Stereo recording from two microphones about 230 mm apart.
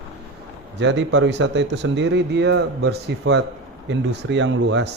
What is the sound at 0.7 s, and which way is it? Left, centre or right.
A man's voice, right.